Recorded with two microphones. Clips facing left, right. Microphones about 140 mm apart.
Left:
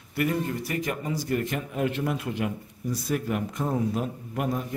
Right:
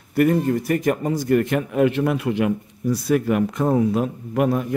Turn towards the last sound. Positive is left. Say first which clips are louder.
# right 9 dB
turn(degrees=-75)  # may be behind; listen again after turning